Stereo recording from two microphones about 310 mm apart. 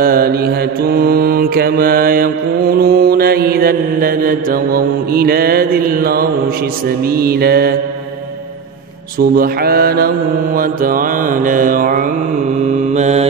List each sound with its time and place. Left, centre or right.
0.0 s mantra: right
9.2 s mantra: right